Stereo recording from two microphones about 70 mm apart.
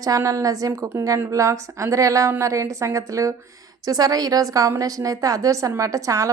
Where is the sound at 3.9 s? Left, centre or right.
Right.